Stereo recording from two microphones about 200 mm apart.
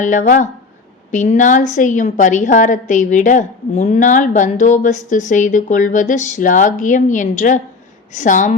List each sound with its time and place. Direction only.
0.0 s a woman's voice: 40° left (ahead or behind)